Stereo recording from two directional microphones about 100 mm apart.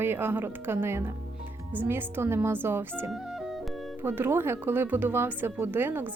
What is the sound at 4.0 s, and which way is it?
A woman's voice, 20° right (ahead or behind).